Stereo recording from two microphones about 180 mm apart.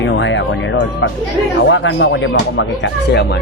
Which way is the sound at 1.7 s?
85° left.